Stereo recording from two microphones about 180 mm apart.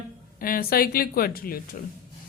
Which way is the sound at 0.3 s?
55° left (ahead or behind).